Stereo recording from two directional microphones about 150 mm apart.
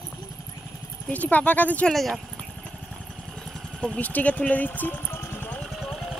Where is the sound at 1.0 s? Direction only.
10° left (ahead or behind).